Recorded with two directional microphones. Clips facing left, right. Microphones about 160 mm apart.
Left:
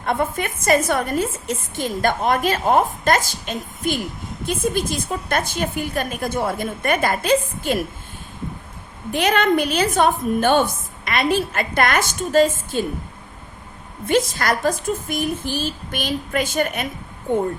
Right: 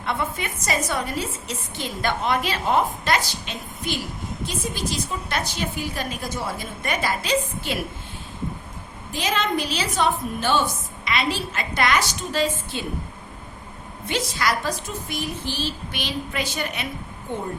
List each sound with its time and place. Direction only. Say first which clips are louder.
0.0 s a woman's voice: left 5 dB; 50° left (ahead or behind)
9.1 s a woman's voice: left 7 dB; 60° left (ahead or behind); by 12.8 s 45° left (ahead or behind)
14.1 s a woman's voice: left 6 dB; 50° left (ahead or behind)